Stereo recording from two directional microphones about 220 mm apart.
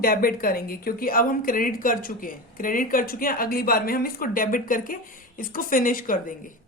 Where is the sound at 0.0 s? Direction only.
40° left (ahead or behind).